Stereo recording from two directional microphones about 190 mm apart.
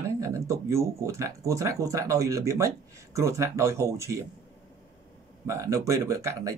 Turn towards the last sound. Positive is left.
turn(degrees=-15)  # may be behind; listen again after turning